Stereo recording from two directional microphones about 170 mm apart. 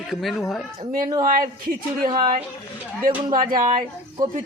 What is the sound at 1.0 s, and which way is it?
Speech, 25° right (ahead or behind).